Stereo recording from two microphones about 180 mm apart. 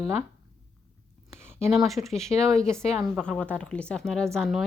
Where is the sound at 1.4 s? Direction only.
40° left (ahead or behind).